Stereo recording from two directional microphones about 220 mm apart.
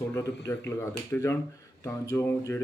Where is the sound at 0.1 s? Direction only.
15° left (ahead or behind).